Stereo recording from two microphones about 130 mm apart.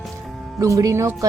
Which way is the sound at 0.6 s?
25° right (ahead or behind).